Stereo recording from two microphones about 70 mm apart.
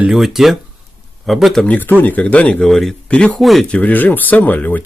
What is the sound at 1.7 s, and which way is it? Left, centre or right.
Speech, left.